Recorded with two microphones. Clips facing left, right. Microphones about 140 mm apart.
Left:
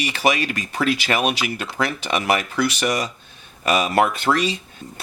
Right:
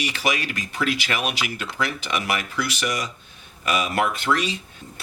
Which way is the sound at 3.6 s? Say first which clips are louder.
Left 5 dB; 30° left (ahead or behind).